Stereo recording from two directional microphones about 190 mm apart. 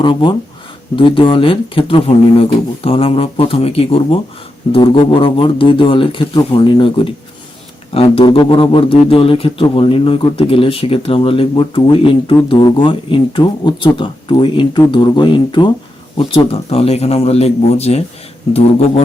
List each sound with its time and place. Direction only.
0.0 s a man's voice: 25° left (ahead or behind)